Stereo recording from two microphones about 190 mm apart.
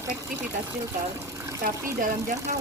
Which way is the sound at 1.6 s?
45° right (ahead or behind).